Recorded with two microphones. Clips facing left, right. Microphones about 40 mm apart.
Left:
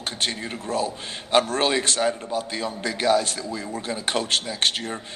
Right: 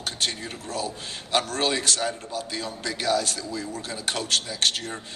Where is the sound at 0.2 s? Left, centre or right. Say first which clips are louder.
Left 3 dB; left.